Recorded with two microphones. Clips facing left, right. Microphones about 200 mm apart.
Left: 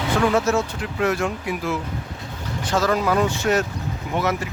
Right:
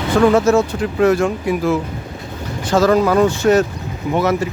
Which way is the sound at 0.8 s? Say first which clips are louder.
Right 8 dB; 35° right (ahead or behind).